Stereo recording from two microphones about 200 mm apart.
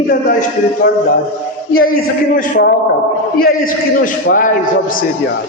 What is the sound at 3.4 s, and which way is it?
A man's voice, 45° left (ahead or behind).